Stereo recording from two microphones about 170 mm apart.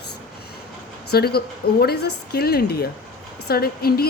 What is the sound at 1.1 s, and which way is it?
A woman's voice, 65° left (ahead or behind).